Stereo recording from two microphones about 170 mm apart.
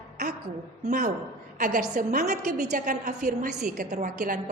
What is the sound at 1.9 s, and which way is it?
Speech, 45° right (ahead or behind).